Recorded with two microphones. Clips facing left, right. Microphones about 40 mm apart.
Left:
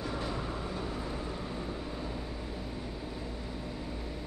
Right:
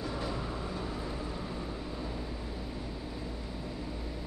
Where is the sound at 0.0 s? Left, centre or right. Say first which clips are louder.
Even; left.